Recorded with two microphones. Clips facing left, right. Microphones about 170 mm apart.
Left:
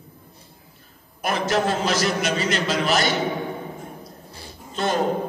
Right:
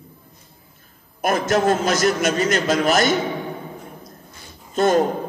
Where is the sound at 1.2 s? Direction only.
45° right (ahead or behind).